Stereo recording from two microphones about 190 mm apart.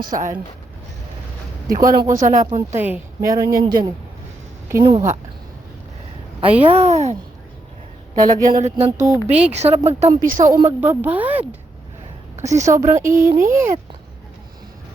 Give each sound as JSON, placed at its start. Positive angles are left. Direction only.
{"t": 0.0, "sound": "speech", "side_deg": -45}
{"t": 1.8, "sound": "a woman's voice", "side_deg": -15}
{"t": 6.7, "sound": "a woman's voice", "side_deg": -35}
{"t": 8.1, "sound": "speech", "side_deg": -20}
{"t": 8.7, "sound": "a woman's voice", "side_deg": -30}
{"t": 9.0, "sound": "a woman's voice", "side_deg": -10}
{"t": 9.5, "sound": "a woman's voice", "side_deg": -35}
{"t": 10.5, "sound": "a woman's voice", "side_deg": -15}
{"t": 12.4, "sound": "speech", "side_deg": -35}
{"t": 12.6, "sound": "a woman's voice", "side_deg": -15}